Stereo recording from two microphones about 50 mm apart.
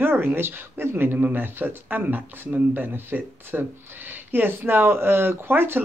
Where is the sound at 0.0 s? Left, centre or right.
Right.